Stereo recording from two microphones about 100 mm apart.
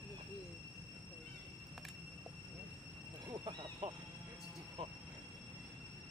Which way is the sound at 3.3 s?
50° right (ahead or behind).